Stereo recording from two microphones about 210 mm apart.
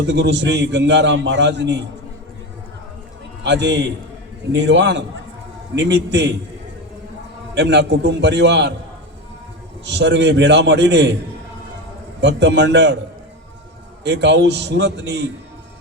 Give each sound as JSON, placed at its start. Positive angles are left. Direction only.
{"t": 0.0, "sound": "a man's voice", "side_deg": -55}
{"t": 3.4, "sound": "a man's voice", "side_deg": -55}
{"t": 7.5, "sound": "a man's voice", "side_deg": -55}
{"t": 9.8, "sound": "a man's voice", "side_deg": -55}
{"t": 12.2, "sound": "a man's voice", "side_deg": -55}
{"t": 14.0, "sound": "a man's voice", "side_deg": -55}